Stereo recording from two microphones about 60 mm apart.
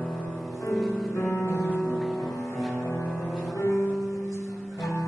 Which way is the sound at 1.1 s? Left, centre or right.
Left.